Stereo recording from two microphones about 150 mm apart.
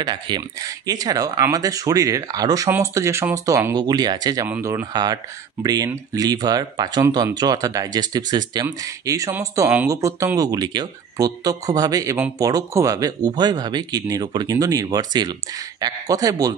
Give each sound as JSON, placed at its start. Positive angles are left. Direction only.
{"t": 0.0, "sound": "speech", "side_deg": -30}
{"t": 4.5, "sound": "speech", "side_deg": -15}
{"t": 4.9, "sound": "speech", "side_deg": -25}